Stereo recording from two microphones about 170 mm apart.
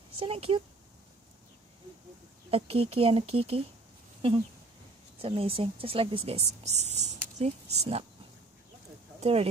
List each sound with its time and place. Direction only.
0.1 s speech: 35° right (ahead or behind)
2.5 s speech: 35° right (ahead or behind)
9.2 s speech: 35° right (ahead or behind)